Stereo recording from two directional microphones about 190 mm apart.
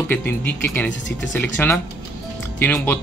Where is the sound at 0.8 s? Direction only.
75° left (ahead or behind).